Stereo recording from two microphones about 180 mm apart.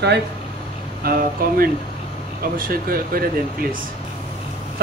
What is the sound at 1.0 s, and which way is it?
Speech, 55° right (ahead or behind).